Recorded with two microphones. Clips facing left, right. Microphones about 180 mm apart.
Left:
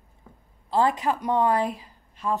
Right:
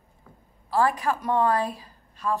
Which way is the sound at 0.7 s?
20° left (ahead or behind).